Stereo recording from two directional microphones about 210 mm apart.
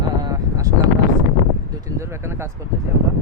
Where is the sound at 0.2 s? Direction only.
15° right (ahead or behind).